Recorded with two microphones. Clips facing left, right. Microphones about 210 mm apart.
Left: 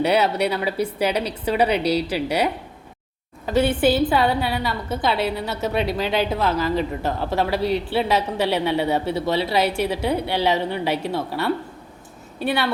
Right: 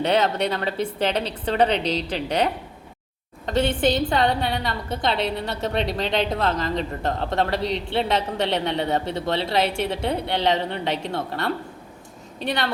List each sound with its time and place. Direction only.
0.0 s a woman's voice: 10° left (ahead or behind)
9.6 s a woman's voice: 25° right (ahead or behind)
10.2 s a woman's voice: 5° left (ahead or behind)